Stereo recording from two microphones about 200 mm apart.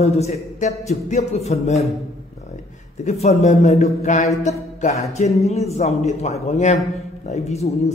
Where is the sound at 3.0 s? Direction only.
30° left (ahead or behind).